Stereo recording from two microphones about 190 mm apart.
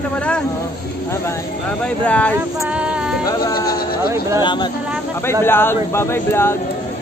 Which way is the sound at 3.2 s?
20° left (ahead or behind).